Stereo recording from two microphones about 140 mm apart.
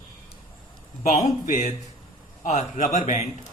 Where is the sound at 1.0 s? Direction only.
60° left (ahead or behind).